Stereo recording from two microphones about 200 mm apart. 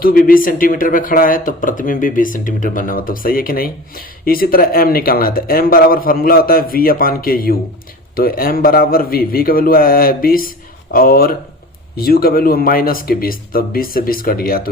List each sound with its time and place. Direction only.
0.0 s speech: 45° left (ahead or behind)